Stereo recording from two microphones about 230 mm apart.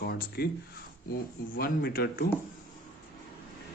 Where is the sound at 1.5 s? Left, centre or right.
Left.